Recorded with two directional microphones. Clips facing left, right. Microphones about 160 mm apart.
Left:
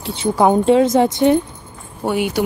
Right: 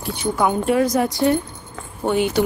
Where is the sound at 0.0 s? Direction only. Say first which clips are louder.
Left 5 dB; 25° left (ahead or behind).